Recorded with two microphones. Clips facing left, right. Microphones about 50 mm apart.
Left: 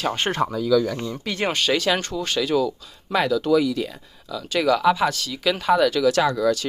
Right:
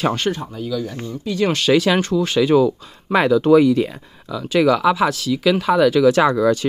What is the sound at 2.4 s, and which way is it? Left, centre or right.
Speech, right.